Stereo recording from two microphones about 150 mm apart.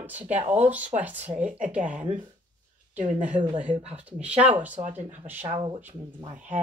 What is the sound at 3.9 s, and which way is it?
Speech, 10° right (ahead or behind).